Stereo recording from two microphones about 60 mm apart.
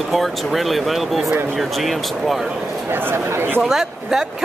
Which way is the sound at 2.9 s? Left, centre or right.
Right.